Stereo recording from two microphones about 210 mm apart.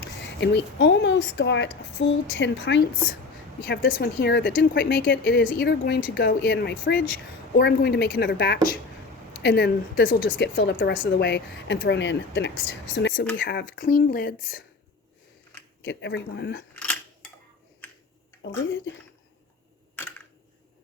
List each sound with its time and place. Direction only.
0.0 s speech: 55° left (ahead or behind)
15.8 s speech: 55° left (ahead or behind)
16.7 s camera: 5° left (ahead or behind)